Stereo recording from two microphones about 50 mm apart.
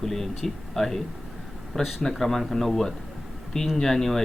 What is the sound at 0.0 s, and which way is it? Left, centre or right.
Speech, centre.